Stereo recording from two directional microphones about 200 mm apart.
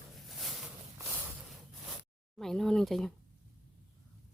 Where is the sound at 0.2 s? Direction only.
Centre (ahead or behind).